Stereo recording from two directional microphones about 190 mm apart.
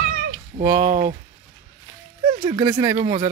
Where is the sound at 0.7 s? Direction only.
10° right (ahead or behind).